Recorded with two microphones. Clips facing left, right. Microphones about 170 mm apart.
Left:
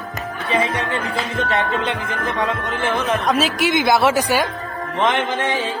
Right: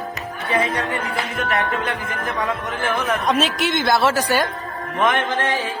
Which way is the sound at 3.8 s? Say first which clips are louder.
Left 2 dB; 15° left (ahead or behind).